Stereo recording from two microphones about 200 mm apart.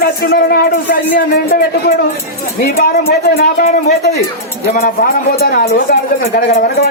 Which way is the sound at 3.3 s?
50° left (ahead or behind).